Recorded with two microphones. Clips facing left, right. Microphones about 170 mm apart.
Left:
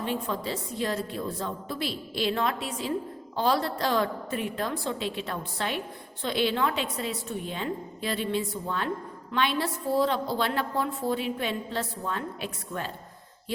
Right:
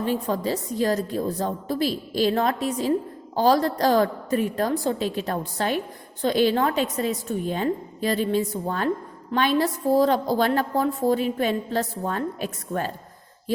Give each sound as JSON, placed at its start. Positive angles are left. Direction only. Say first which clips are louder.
{"t": 0.0, "sound": "a woman's voice", "louder": "right 6 dB", "side_deg": -40}